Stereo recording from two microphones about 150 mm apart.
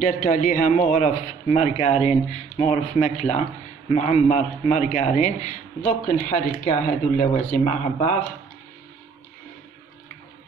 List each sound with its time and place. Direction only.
0.0 s speech: 60° left (ahead or behind)